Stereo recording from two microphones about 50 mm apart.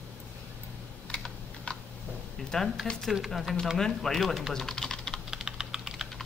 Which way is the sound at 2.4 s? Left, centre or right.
Centre.